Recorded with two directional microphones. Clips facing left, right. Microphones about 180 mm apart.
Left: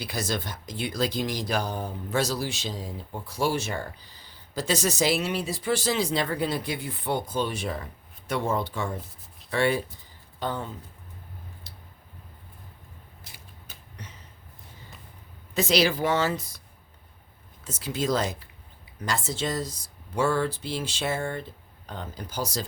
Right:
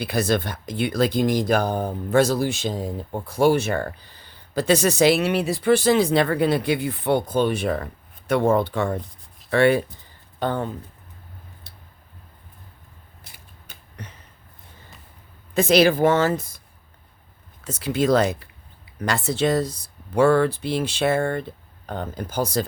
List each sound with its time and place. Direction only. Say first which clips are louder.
0.0 s speech: right 8 dB; 60° right (ahead or behind)
11.7 s a sound: even; 60° right (ahead or behind)
13.3 s creak: right 1 dB; 55° right (ahead or behind)
15.5 s a woman's voice: right 7 dB; 55° right (ahead or behind)
17.6 s a woman's voice: right 7 dB; 65° right (ahead or behind)